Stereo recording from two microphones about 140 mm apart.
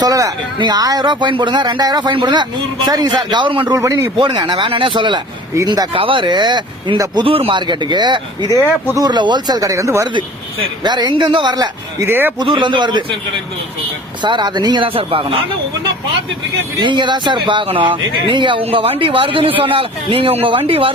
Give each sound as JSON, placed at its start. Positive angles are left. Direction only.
{"t": 0.0, "sound": "speech", "side_deg": -25}
{"t": 3.7, "sound": "speech", "side_deg": -25}
{"t": 4.2, "sound": "speech", "side_deg": -35}
{"t": 12.0, "sound": "speech", "side_deg": -15}
{"t": 12.4, "sound": "speech", "side_deg": -35}
{"t": 14.2, "sound": "speech", "side_deg": -35}
{"t": 16.8, "sound": "speech", "side_deg": -35}